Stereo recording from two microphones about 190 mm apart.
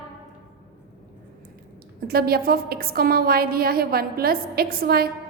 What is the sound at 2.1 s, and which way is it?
A woman's voice, 55° right (ahead or behind).